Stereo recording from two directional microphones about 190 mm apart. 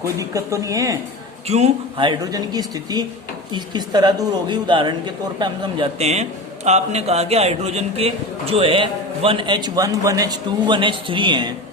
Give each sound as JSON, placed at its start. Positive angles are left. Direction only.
{"t": 0.0, "sound": "speech", "side_deg": -15}
{"t": 1.5, "sound": "a man's voice", "side_deg": -35}